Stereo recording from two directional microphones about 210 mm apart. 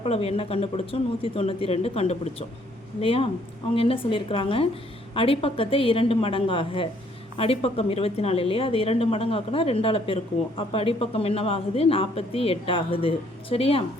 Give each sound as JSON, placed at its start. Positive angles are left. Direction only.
{"t": 0.0, "sound": "speech", "side_deg": 30}